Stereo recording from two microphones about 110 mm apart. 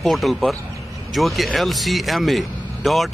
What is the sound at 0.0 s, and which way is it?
Speech, centre (ahead or behind).